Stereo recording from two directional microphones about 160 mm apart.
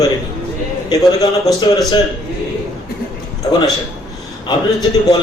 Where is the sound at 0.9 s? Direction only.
25° left (ahead or behind).